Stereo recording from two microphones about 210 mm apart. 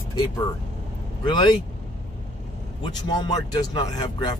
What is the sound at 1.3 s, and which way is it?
Speech, 20° left (ahead or behind).